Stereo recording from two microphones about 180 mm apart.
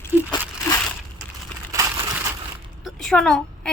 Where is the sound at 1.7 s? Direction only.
15° right (ahead or behind).